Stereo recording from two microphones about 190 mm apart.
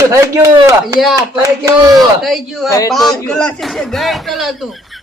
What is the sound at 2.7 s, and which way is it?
Speech, 15° left (ahead or behind).